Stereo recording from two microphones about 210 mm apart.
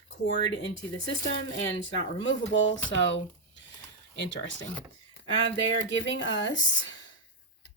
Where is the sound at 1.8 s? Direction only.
65° left (ahead or behind).